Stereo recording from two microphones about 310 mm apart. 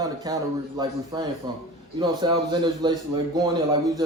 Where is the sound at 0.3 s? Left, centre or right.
Centre.